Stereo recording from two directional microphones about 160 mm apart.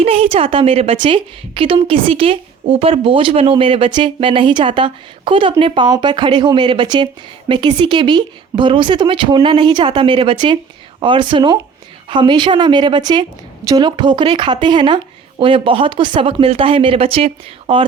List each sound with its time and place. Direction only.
0.0 s a woman's voice: 35° right (ahead or behind)